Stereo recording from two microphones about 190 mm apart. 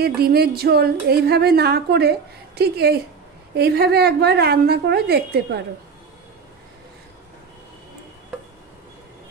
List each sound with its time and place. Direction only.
0.0 s speech: 55° right (ahead or behind)